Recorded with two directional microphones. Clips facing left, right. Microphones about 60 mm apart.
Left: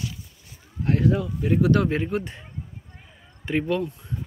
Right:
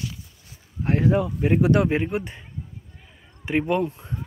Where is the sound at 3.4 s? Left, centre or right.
Right.